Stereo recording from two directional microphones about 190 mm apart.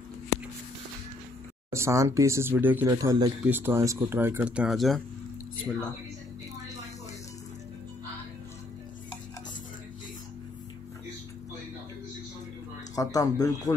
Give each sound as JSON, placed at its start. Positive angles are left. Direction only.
{"t": 1.7, "sound": "speech", "side_deg": -15}
{"t": 12.9, "sound": "speech", "side_deg": 20}